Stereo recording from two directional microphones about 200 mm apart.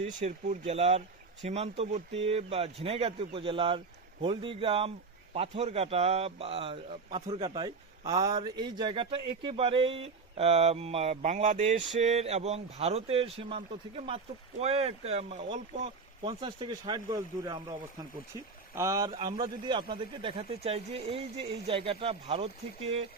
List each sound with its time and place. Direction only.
0.0 s speech: 35° right (ahead or behind)